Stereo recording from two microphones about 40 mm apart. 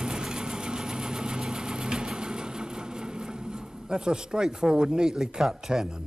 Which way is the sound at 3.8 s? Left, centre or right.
Centre.